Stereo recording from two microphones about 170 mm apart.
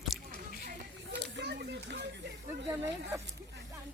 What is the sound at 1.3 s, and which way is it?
Children playing, 75° right (ahead or behind).